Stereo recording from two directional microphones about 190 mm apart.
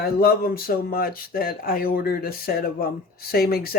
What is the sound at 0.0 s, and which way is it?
Speech, 55° left (ahead or behind).